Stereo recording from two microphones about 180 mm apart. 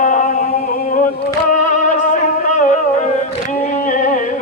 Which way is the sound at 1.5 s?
45° left (ahead or behind).